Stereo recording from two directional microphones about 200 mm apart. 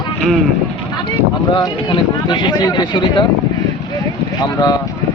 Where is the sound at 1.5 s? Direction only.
25° left (ahead or behind).